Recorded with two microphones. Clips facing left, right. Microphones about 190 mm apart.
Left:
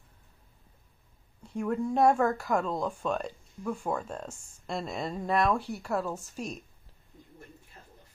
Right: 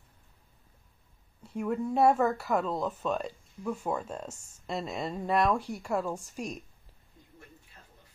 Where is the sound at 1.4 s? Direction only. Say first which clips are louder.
Left 1 dB; 5° right (ahead or behind).